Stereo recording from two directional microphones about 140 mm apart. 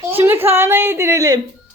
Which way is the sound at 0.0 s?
15° right (ahead or behind).